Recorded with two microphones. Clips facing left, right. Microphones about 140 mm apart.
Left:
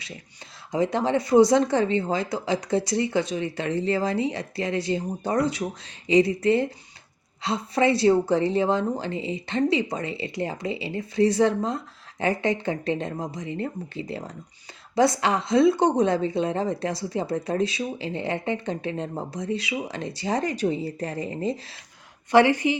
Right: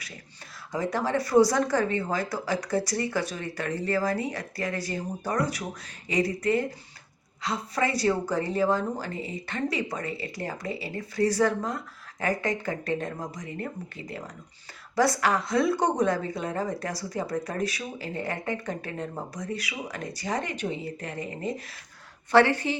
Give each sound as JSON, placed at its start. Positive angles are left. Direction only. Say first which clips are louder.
{"t": 0.7, "sound": "speech", "louder": "left 4 dB", "side_deg": 20}
{"t": 22.3, "sound": "speech", "louder": "left 3 dB", "side_deg": 15}